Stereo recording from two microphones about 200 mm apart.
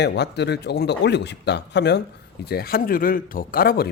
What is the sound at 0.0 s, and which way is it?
Speech, 55° left (ahead or behind).